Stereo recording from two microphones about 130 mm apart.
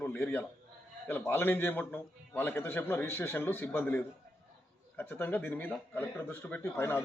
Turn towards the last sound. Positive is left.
turn(degrees=20)  # may be behind; listen again after turning